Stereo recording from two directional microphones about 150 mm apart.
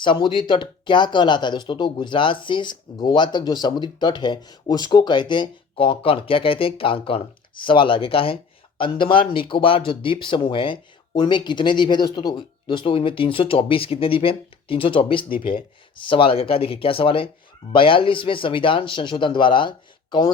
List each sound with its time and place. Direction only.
0.0 s speech: 30° left (ahead or behind)